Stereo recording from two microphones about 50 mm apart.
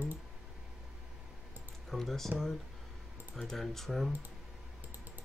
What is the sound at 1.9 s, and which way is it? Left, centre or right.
Speech, centre.